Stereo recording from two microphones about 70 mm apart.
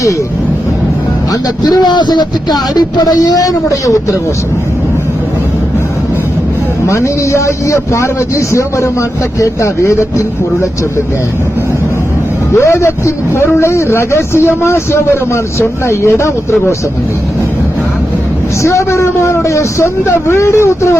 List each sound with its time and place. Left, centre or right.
1.3 s speech: left
6.8 s a man's voice: left
12.5 s a man's voice: left
18.6 s a man's voice: left